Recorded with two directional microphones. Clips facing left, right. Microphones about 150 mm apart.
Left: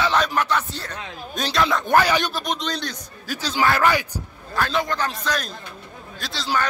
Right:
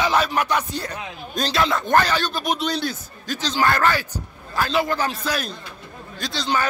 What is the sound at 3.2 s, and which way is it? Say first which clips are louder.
Speech: even; 10° left (ahead or behind).